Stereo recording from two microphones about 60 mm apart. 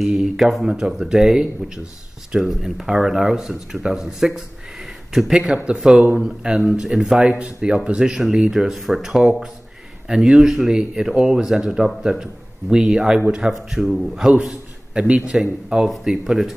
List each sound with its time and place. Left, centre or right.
0.0 s speech: centre